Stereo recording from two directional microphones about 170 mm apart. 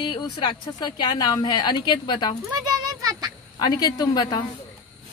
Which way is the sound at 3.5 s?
25° left (ahead or behind).